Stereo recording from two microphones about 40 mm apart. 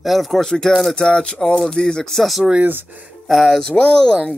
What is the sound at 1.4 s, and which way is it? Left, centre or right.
Speech, centre.